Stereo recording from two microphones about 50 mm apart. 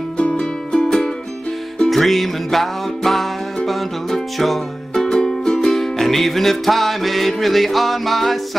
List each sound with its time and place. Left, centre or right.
0.2 s music: centre
1.9 s music: centre